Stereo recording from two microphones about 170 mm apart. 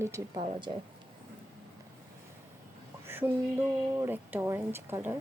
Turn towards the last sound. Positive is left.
turn(degrees=-15)  # may be behind; listen again after turning